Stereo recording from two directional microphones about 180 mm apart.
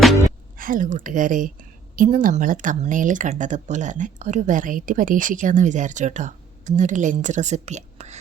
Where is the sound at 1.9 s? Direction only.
50° right (ahead or behind).